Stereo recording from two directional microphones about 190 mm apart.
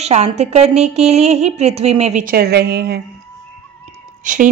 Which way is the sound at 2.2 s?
55° right (ahead or behind).